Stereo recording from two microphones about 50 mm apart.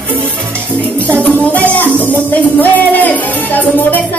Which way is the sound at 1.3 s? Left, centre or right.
Left.